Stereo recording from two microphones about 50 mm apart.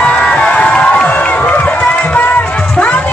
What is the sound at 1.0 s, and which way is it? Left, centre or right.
Run, left.